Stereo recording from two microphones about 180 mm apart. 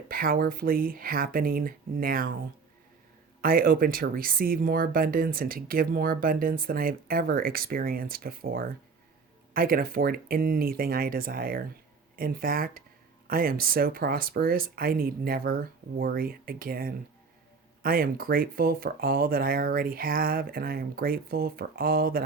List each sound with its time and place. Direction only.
0.1 s speech: 55° right (ahead or behind)
3.4 s speech: 55° right (ahead or behind)